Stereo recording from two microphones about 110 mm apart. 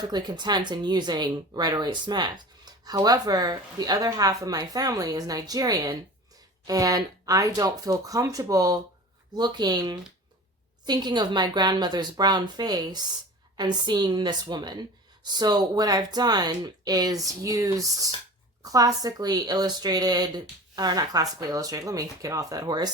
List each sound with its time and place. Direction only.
0.0 s speech: 40° right (ahead or behind)